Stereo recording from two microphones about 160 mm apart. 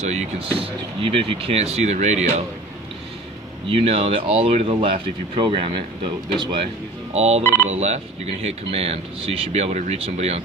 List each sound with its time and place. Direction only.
0.1 s speech: 40° right (ahead or behind)
3.7 s speech: 35° right (ahead or behind)
7.1 s speech: 40° right (ahead or behind)
7.4 s speech: 15° left (ahead or behind)
7.7 s speech: 40° right (ahead or behind)